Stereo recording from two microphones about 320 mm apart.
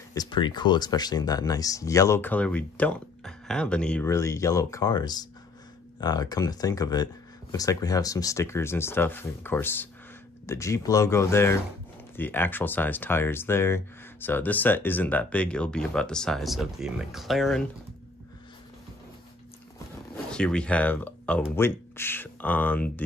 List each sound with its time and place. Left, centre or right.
0.1 s speech: centre
20.2 s speech: centre